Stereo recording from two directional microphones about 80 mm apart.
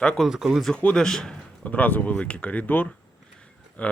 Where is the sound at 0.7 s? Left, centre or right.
Centre.